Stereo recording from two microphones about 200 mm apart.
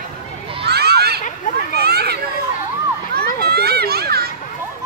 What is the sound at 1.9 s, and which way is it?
Children playing, 55° right (ahead or behind).